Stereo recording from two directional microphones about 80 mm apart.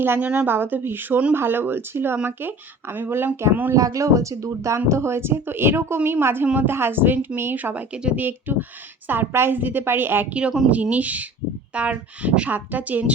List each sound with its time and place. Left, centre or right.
0.0 s speech: right
3.7 s speech: right
10.3 s a woman's voice: centre